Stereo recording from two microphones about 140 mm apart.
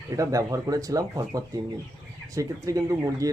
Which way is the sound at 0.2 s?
25° right (ahead or behind).